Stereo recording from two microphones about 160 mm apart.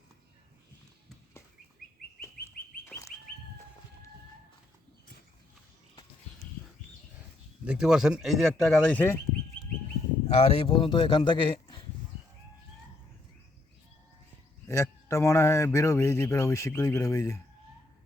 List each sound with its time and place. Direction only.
2.8 s bird: 15° left (ahead or behind)
7.6 s speech: 5° right (ahead or behind); by 9.1 s 10° left (ahead or behind)
10.2 s speech: 40° left (ahead or behind)
14.7 s a man's voice: 20° left (ahead or behind)